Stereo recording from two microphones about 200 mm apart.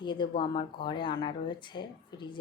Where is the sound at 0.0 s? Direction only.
20° left (ahead or behind).